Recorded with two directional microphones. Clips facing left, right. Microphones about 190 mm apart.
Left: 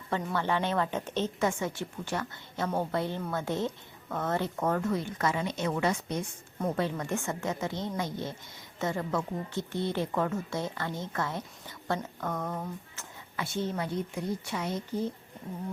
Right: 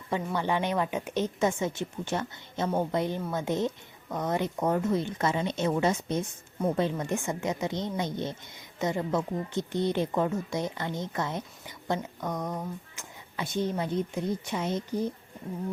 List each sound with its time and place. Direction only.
0.3 s a woman's voice: 15° right (ahead or behind)